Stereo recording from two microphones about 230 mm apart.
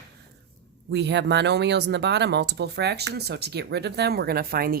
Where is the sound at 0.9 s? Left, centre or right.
Right.